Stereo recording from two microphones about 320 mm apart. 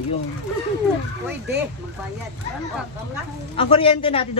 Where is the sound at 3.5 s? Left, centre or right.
Centre.